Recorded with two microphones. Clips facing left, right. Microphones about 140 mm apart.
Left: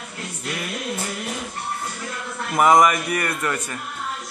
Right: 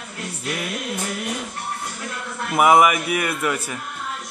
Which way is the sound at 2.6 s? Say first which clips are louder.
Right 1 dB; 10° right (ahead or behind).